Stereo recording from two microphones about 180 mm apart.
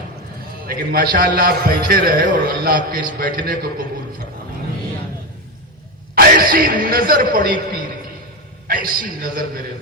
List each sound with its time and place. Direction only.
0.7 s a man's voice: 55° right (ahead or behind)
6.1 s a man's voice: 55° right (ahead or behind)